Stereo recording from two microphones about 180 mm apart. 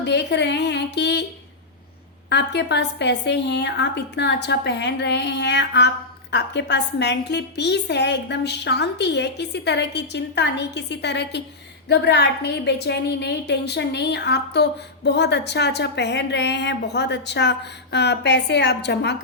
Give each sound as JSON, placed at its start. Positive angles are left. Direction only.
{"t": 0.0, "sound": "speech", "side_deg": 70}
{"t": 2.3, "sound": "a woman's voice", "side_deg": 70}